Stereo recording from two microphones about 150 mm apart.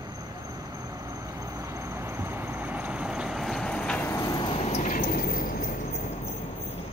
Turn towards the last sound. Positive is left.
turn(degrees=60)  # may be behind; listen again after turning